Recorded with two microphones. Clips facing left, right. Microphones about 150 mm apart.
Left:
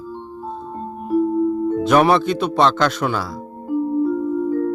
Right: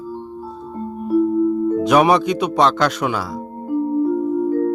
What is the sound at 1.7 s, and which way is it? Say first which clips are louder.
Speech: even; 5° right (ahead or behind).